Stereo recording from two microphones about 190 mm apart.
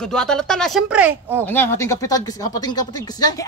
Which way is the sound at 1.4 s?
10° left (ahead or behind).